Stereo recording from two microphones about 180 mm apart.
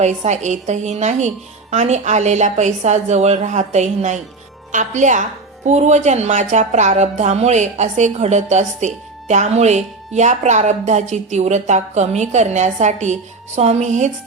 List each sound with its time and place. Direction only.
0.0 s a woman's voice: 40° right (ahead or behind)